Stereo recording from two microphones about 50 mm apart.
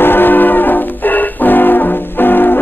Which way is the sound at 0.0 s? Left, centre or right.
Left.